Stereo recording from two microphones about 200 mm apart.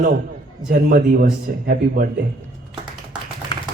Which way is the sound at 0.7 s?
45° right (ahead or behind).